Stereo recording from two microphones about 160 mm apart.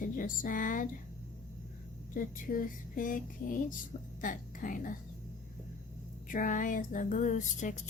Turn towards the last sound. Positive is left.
turn(degrees=50)  # may be behind; listen again after turning